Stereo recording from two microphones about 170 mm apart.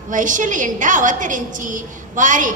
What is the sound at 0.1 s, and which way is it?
A woman's voice, 50° right (ahead or behind).